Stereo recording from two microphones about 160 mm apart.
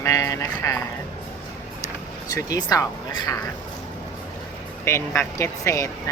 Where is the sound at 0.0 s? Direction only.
20° left (ahead or behind).